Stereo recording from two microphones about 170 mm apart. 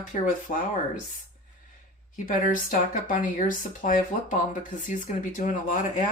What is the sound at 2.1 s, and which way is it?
Speech, 50° left (ahead or behind).